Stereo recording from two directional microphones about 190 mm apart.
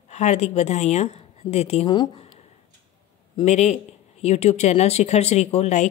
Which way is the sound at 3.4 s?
35° left (ahead or behind).